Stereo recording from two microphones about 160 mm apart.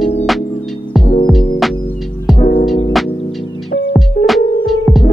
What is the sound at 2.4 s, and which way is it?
Music, 40° left (ahead or behind).